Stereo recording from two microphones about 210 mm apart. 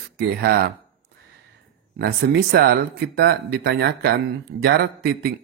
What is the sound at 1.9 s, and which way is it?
Speech, 50° right (ahead or behind).